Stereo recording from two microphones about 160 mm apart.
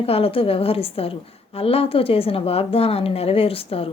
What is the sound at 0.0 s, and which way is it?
Speech, 35° left (ahead or behind).